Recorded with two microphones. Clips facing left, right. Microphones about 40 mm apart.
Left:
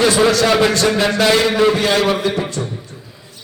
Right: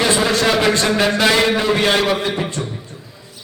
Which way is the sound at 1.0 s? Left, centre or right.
Centre.